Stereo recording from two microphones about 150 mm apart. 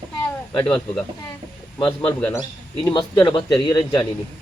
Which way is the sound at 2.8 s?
30° left (ahead or behind).